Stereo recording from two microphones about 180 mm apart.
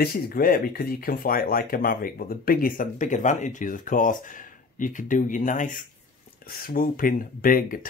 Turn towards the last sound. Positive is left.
turn(degrees=50)  # may be behind; listen again after turning